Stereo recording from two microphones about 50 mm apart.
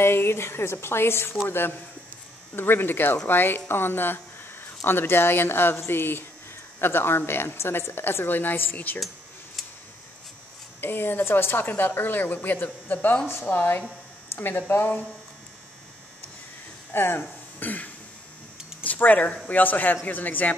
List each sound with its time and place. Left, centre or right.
0.0 s speech: left
10.8 s speech: left
16.9 s speech: left
17.6 s throat clearing: left
18.9 s speech: left